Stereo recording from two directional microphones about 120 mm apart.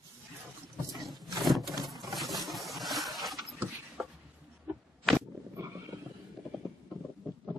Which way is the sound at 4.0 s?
20° right (ahead or behind).